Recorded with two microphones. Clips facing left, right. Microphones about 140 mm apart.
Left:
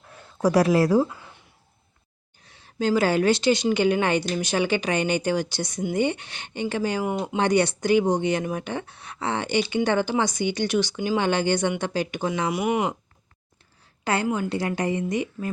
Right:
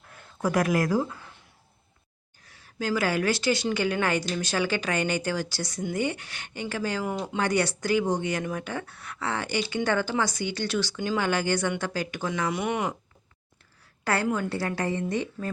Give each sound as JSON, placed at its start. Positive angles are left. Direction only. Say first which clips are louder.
{"t": 0.1, "sound": "speech", "louder": "left 6 dB", "side_deg": 30}
{"t": 2.4, "sound": "a woman's voice", "louder": "left 6 dB", "side_deg": 25}
{"t": 14.0, "sound": "speech", "louder": "left 2 dB", "side_deg": 20}